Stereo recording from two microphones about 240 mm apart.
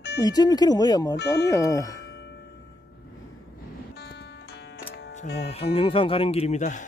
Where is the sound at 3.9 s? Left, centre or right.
Left.